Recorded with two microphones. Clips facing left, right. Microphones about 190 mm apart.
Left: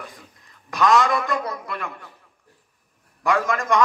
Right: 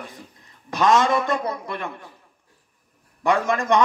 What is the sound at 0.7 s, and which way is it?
A man's voice, 30° right (ahead or behind).